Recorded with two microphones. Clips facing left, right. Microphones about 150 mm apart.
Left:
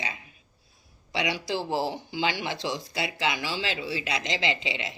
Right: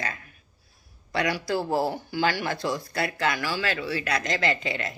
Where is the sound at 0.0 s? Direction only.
50° right (ahead or behind).